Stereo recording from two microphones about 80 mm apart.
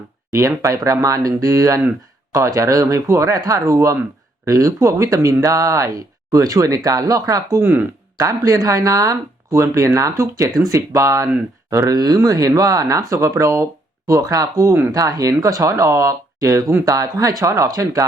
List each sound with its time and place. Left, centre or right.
0.3 s speech: right
7.6 s speech: right
8.2 s speech: right